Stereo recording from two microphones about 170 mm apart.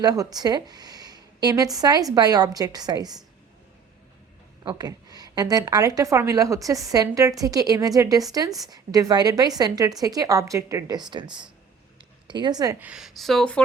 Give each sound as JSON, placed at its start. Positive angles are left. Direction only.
{"t": 0.0, "sound": "a woman's voice", "side_deg": -20}
{"t": 4.6, "sound": "a woman's voice", "side_deg": -25}
{"t": 12.8, "sound": "speech", "side_deg": -5}